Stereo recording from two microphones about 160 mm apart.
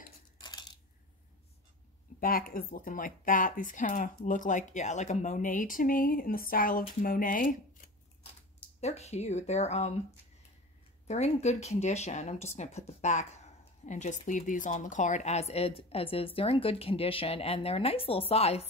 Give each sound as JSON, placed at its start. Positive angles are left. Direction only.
{"t": 0.4, "sound": "cutlery", "side_deg": 25}
{"t": 2.1, "sound": "speech", "side_deg": 65}
{"t": 8.8, "sound": "speech", "side_deg": 45}
{"t": 11.1, "sound": "speech", "side_deg": 45}